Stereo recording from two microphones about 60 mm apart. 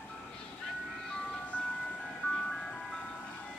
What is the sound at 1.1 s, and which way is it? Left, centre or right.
Ice cream truck, centre.